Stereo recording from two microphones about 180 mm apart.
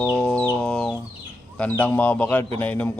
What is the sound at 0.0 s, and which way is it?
Chicken, 10° left (ahead or behind).